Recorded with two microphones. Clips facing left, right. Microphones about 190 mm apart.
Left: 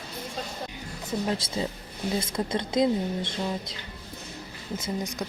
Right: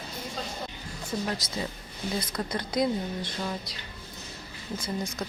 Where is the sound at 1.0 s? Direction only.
20° left (ahead or behind).